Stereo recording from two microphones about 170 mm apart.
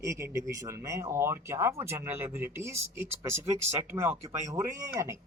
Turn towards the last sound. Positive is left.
turn(degrees=-15)  # may be behind; listen again after turning